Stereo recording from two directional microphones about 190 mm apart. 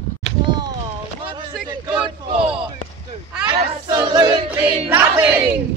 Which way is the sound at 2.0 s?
30° right (ahead or behind).